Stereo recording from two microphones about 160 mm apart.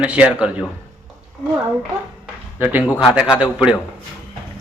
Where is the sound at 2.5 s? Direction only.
10° right (ahead or behind).